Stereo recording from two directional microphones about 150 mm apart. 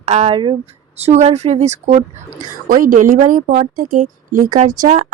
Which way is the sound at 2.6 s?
65° right (ahead or behind).